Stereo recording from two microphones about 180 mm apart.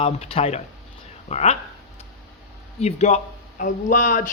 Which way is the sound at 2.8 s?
35° left (ahead or behind).